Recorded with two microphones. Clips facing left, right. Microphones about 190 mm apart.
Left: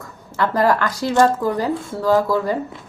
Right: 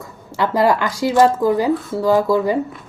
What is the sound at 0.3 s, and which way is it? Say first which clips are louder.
A woman's voice: right 1 dB; 15° right (ahead or behind).